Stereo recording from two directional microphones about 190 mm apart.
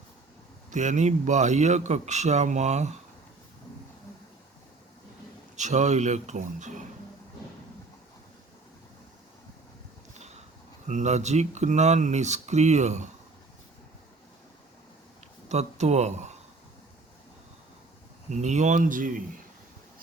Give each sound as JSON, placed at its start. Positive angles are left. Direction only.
{"t": 0.7, "sound": "a man's voice", "side_deg": -40}
{"t": 5.5, "sound": "a man's voice", "side_deg": -40}
{"t": 10.8, "sound": "a man's voice", "side_deg": -40}
{"t": 15.4, "sound": "speech", "side_deg": -35}
{"t": 18.3, "sound": "a man's voice", "side_deg": -40}